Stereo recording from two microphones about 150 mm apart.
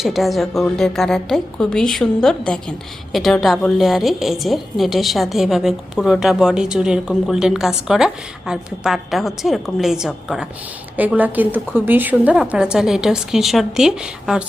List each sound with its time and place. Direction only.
0.0 s a woman's voice: centre (ahead or behind)